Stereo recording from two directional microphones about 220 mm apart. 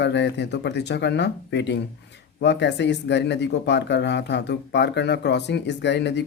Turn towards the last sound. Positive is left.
turn(degrees=50)  # may be behind; listen again after turning